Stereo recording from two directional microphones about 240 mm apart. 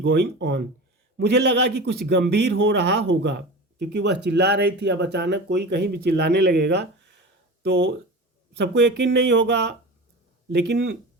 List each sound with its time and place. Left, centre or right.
0.0 s a man's voice: right